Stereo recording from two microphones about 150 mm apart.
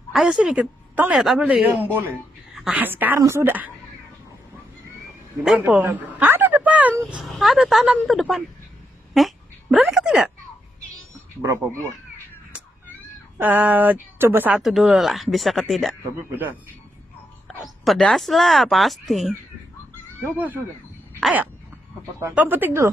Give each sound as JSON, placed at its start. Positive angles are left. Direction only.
{"t": 0.1, "sound": "a woman's voice", "side_deg": -5}
{"t": 5.4, "sound": "a sound", "side_deg": -5}
{"t": 7.2, "sound": "speech", "side_deg": 0}
{"t": 9.1, "sound": "a sound", "side_deg": 0}
{"t": 11.4, "sound": "speech", "side_deg": -20}
{"t": 13.4, "sound": "speech", "side_deg": -10}
{"t": 14.6, "sound": "speech", "side_deg": 0}
{"t": 17.5, "sound": "speech", "side_deg": 0}
{"t": 20.3, "sound": "speech", "side_deg": -10}
{"t": 21.2, "sound": "a sound", "side_deg": -10}
{"t": 22.2, "sound": "speech", "side_deg": -10}